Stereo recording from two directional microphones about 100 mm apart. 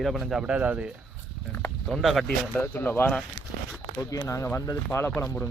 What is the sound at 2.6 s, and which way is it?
Speech, 20° left (ahead or behind).